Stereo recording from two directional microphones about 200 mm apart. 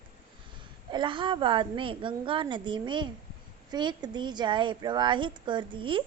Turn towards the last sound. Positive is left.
turn(degrees=-25)  # may be behind; listen again after turning